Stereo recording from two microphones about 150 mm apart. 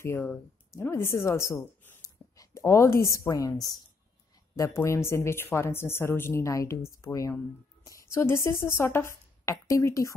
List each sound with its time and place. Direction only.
0.0 s speech: 15° left (ahead or behind)